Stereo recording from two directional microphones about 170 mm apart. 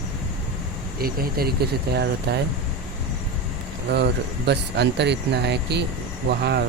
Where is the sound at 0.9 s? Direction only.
60° right (ahead or behind); by 2.4 s 80° right.